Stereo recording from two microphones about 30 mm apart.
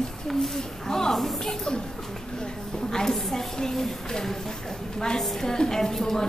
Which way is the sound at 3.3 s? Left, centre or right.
Centre.